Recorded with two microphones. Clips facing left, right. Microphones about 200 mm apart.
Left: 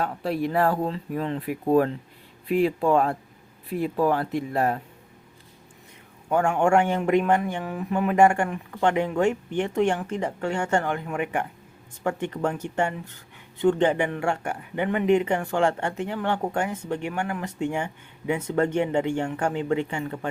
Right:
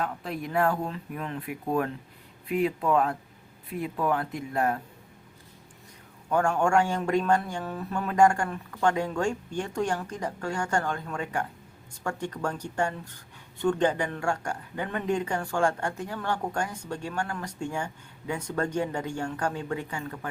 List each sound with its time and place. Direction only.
0.0 s speech: 30° left (ahead or behind)
6.6 s speech: 20° left (ahead or behind)